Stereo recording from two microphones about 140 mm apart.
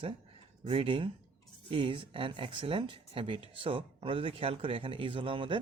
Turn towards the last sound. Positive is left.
turn(degrees=-35)  # may be behind; listen again after turning